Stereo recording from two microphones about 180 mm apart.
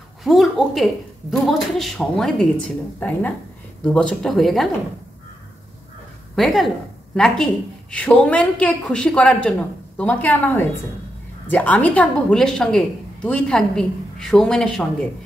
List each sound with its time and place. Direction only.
0.2 s a sound: centre (ahead or behind)
1.3 s a woman's voice: centre (ahead or behind)
6.3 s a woman's voice: centre (ahead or behind)